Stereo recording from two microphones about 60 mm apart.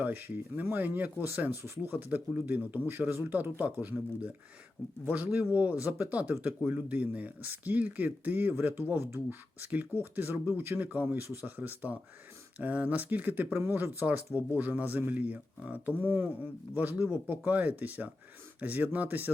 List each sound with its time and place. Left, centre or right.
0.0 s speech: right
9.0 s speech: right
9.6 s speech: right
11.2 s speech: right
11.5 s speech: right